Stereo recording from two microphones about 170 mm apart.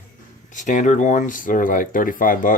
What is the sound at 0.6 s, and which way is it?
Speech, 45° left (ahead or behind).